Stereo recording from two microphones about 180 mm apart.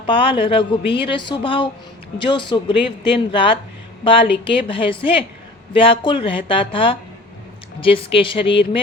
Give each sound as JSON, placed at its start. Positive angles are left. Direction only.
{"t": 0.0, "sound": "speech", "side_deg": 30}